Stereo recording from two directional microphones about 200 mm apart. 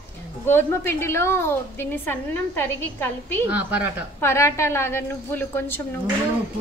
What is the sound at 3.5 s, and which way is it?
Speech, 5° right (ahead or behind).